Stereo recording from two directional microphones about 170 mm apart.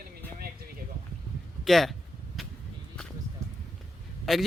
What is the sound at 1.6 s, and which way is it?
Speech, centre (ahead or behind).